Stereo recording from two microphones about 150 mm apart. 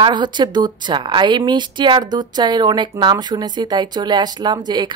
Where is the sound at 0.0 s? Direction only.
30° right (ahead or behind).